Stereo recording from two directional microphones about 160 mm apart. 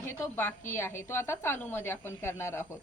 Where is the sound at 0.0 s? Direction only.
15° left (ahead or behind).